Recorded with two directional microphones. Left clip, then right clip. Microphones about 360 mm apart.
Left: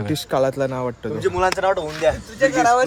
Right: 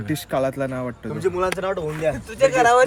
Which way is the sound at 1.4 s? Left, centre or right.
Left.